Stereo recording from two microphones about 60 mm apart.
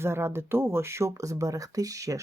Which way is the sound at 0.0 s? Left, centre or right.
Right.